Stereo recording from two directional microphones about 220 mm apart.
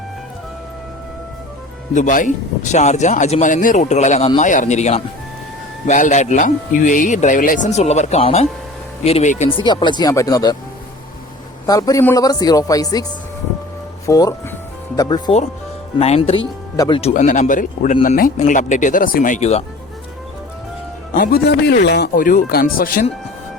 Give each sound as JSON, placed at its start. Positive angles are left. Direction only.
{"t": 1.9, "sound": "speech", "side_deg": 35}
{"t": 11.6, "sound": "a woman's voice", "side_deg": 15}
{"t": 14.1, "sound": "a woman's voice", "side_deg": 15}
{"t": 16.7, "sound": "a woman's voice", "side_deg": 15}
{"t": 17.0, "sound": "speech", "side_deg": 30}
{"t": 21.1, "sound": "speech", "side_deg": 40}